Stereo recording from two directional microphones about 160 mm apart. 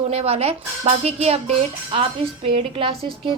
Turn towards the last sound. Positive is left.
turn(degrees=-35)  # may be behind; listen again after turning